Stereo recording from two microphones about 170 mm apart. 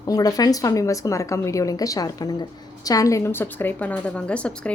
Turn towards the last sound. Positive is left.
turn(degrees=5)  # may be behind; listen again after turning